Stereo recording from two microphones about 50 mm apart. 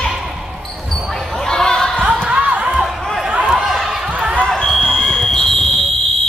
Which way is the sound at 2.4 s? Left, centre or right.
Right.